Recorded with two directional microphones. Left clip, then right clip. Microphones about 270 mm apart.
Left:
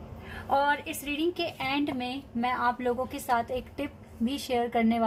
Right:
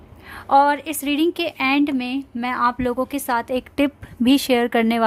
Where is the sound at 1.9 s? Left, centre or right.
Right.